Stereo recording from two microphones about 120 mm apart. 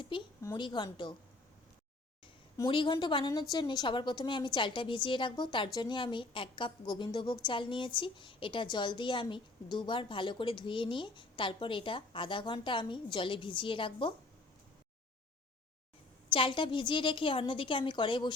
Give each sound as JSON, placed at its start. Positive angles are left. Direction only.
{"t": 0.1, "sound": "a sound", "side_deg": 40}
{"t": 0.5, "sound": "a woman's voice", "side_deg": 40}
{"t": 2.6, "sound": "a woman's voice", "side_deg": 45}
{"t": 16.3, "sound": "a woman's voice", "side_deg": 45}